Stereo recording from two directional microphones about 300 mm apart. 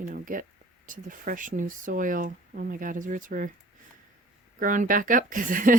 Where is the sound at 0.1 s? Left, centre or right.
Right.